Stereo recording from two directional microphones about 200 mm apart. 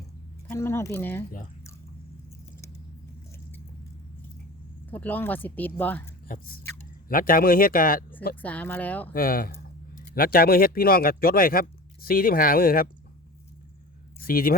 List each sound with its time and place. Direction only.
0.4 s speech: 10° left (ahead or behind)
4.9 s speech: 10° left (ahead or behind)
6.2 s speech: 45° left (ahead or behind)
8.4 s speech: 10° left (ahead or behind)
9.1 s speech: 45° left (ahead or behind)
14.2 s speech: 45° left (ahead or behind)